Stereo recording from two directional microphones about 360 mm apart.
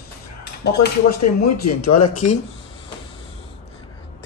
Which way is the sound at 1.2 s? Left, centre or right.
Left.